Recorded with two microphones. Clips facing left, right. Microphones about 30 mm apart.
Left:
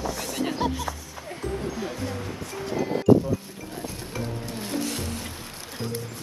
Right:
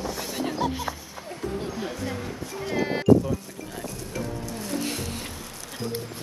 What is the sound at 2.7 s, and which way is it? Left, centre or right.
Horse, right.